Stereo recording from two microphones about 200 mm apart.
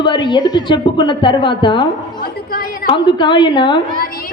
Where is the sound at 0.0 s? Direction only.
25° left (ahead or behind).